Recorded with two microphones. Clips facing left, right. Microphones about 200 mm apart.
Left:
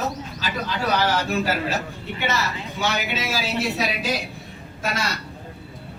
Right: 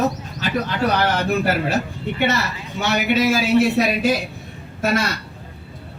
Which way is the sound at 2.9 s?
55° right (ahead or behind).